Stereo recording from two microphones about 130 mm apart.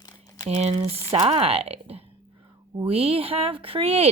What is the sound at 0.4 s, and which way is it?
A woman's voice, 55° right (ahead or behind).